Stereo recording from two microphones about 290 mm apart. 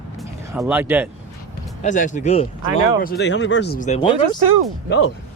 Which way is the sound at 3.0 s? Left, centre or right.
Left.